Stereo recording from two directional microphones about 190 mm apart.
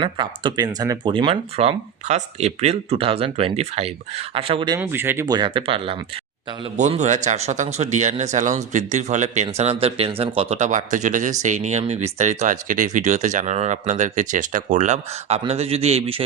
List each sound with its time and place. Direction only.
0.0 s speech: 25° right (ahead or behind)
4.8 s speech: 10° right (ahead or behind); by 16.2 s 30° right (ahead or behind)